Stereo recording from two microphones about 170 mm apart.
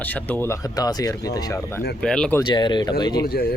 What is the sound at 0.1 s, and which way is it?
Speech, 10° left (ahead or behind).